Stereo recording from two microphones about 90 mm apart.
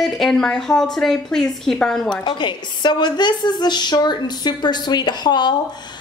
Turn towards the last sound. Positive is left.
turn(degrees=55)  # may be behind; listen again after turning